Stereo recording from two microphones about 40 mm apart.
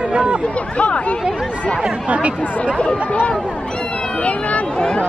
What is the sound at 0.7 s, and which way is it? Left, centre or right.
Speech, left.